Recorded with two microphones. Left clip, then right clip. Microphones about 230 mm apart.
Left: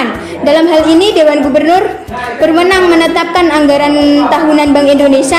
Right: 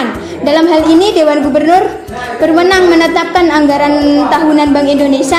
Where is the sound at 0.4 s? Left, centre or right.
Centre.